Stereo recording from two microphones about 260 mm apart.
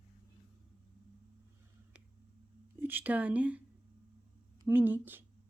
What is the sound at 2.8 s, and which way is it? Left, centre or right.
Speech, centre.